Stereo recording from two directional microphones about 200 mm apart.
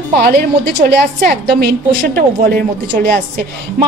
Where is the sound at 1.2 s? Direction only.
50° right (ahead or behind).